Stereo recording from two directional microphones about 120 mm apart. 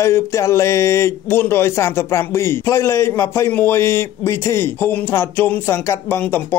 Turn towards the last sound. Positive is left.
turn(degrees=20)  # may be behind; listen again after turning